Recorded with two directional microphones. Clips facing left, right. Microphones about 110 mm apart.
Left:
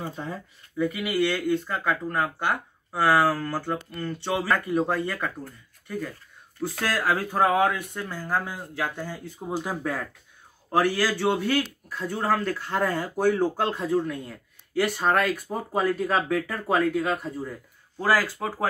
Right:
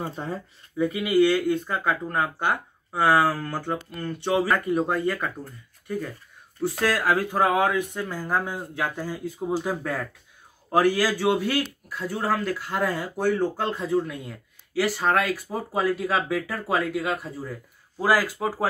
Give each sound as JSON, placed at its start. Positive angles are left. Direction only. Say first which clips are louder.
{"t": 0.1, "sound": "speech", "louder": "right 2 dB", "side_deg": -35}
{"t": 0.7, "sound": "speech", "louder": "right 4 dB", "side_deg": -15}
{"t": 6.9, "sound": "speech", "louder": "even", "side_deg": -5}
{"t": 9.6, "sound": "speech", "louder": "right 1 dB", "side_deg": 5}
{"t": 10.7, "sound": "speech", "louder": "right 2 dB", "side_deg": -15}
{"t": 13.1, "sound": "speech", "louder": "left 1 dB", "side_deg": 10}